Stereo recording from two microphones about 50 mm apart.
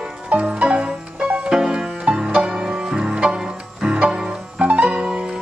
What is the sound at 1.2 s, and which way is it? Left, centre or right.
Music, centre.